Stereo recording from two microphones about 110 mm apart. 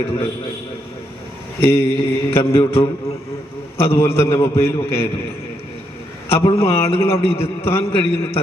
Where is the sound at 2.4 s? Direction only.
60° left (ahead or behind).